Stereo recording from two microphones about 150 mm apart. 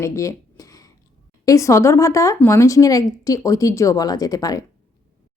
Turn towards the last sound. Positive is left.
turn(degrees=25)  # may be behind; listen again after turning